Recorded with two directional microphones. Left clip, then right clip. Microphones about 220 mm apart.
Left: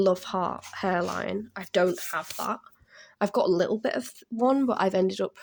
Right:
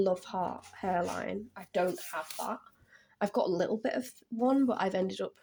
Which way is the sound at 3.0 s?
25° left (ahead or behind).